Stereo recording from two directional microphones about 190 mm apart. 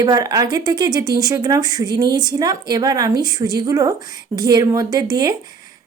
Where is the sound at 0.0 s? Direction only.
20° right (ahead or behind).